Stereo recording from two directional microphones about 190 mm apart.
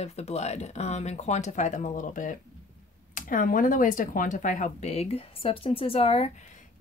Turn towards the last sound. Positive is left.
turn(degrees=30)  # may be behind; listen again after turning